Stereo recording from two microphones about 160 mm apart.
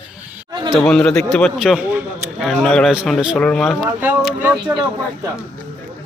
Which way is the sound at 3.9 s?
10° right (ahead or behind).